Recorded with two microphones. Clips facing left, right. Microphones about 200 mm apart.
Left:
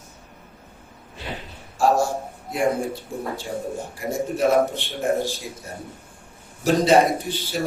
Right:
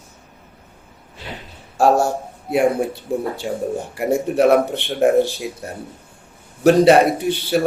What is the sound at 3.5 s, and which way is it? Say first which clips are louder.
A man's voice: right 5 dB; 70° right (ahead or behind).